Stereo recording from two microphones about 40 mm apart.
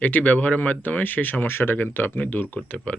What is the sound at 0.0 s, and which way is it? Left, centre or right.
Speech, left.